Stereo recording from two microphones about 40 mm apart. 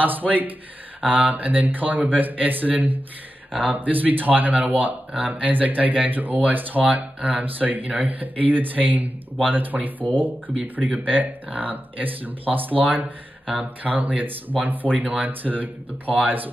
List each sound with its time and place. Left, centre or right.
0.0 s speech: right